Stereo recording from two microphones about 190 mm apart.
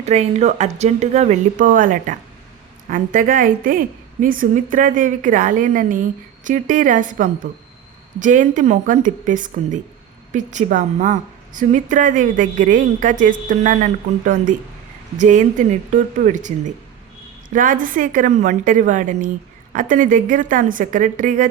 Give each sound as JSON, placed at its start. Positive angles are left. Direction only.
{"t": 0.0, "sound": "a woman's voice", "side_deg": -35}